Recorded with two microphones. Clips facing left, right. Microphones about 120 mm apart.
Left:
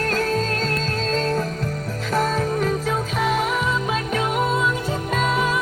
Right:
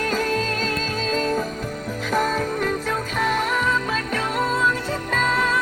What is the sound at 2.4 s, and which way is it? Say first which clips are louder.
Music: left 2 dB; 5° left (ahead or behind).